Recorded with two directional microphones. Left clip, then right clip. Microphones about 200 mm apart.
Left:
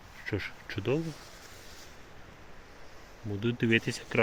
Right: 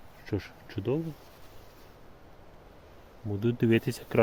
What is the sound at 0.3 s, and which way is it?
Speech, 25° right (ahead or behind).